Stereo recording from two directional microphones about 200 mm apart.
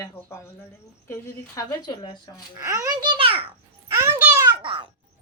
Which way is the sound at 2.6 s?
15° right (ahead or behind).